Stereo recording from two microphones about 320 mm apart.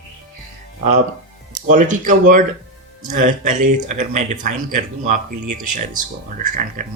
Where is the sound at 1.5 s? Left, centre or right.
Right.